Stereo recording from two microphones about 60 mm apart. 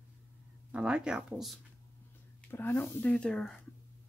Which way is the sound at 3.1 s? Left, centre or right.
Centre.